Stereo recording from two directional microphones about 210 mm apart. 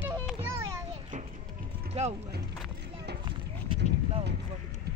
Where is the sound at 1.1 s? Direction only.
35° right (ahead or behind).